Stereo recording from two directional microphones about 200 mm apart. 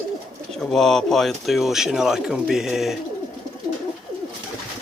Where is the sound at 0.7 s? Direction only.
Centre (ahead or behind).